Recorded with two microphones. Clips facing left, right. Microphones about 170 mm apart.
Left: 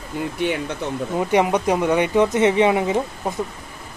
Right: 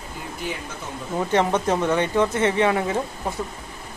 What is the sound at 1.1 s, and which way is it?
Speech, 15° left (ahead or behind).